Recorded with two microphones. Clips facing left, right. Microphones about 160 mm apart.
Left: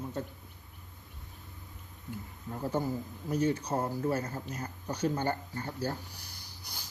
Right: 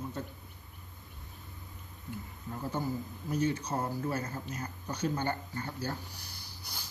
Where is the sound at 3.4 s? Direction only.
40° left (ahead or behind).